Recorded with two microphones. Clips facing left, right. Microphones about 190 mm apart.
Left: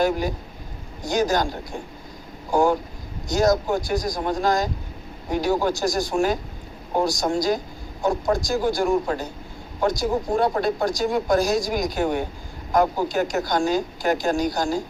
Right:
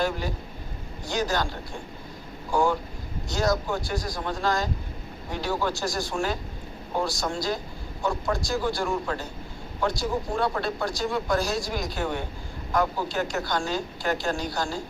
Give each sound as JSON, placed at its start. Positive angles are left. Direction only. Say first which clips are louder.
{"t": 1.0, "sound": "speech", "louder": "left 6 dB", "side_deg": 45}
{"t": 2.5, "sound": "speech", "louder": "left 4 dB", "side_deg": 40}